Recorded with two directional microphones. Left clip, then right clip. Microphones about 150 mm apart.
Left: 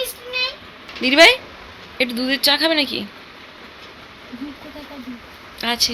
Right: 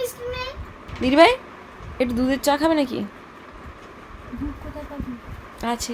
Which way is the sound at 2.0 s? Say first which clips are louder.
Left 3 dB; 45° right (ahead or behind).